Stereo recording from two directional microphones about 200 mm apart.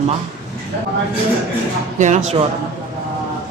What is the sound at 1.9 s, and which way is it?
Speech, 40° right (ahead or behind).